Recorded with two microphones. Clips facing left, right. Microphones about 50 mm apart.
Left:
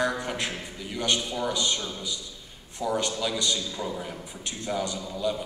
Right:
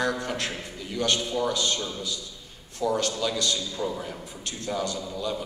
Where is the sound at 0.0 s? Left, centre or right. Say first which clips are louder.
Even; left.